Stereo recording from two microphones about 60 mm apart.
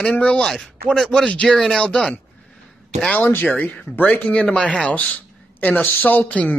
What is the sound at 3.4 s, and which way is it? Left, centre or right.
Speech, left.